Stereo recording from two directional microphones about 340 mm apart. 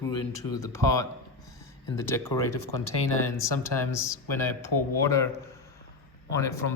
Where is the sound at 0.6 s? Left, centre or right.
Centre.